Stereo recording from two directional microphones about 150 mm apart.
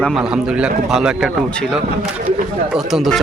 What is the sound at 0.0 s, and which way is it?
A man's voice, centre (ahead or behind).